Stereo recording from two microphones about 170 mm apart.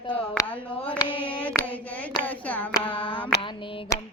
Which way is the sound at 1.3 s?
10° left (ahead or behind).